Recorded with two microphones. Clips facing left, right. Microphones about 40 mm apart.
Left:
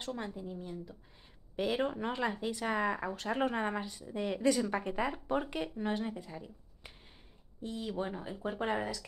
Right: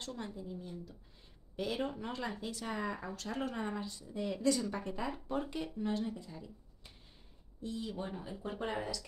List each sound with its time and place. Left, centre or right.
0.0 s a woman's voice: left